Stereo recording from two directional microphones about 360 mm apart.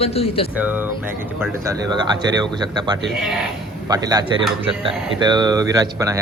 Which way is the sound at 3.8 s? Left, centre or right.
Centre.